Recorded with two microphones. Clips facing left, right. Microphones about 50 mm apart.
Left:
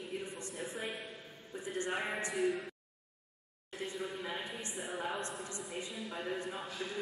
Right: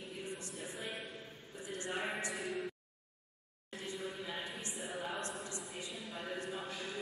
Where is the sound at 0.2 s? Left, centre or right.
Left.